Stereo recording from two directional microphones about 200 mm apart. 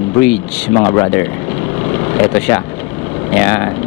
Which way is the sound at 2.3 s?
15° left (ahead or behind).